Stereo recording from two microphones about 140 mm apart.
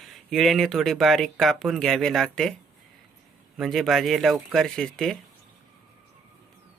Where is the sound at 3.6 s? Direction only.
Centre (ahead or behind).